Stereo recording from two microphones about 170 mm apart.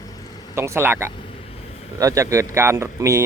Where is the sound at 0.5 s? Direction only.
15° right (ahead or behind).